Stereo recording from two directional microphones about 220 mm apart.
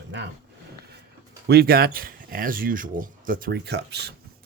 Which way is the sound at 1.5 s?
45° right (ahead or behind).